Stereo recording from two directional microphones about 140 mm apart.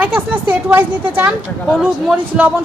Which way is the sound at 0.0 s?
10° right (ahead or behind).